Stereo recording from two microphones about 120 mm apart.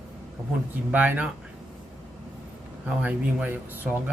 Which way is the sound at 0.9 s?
15° right (ahead or behind).